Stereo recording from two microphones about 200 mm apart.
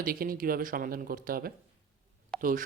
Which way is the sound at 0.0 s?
45° right (ahead or behind).